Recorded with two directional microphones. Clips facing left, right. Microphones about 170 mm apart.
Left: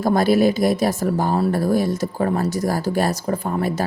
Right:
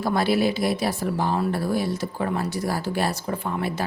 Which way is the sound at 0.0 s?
45° left (ahead or behind).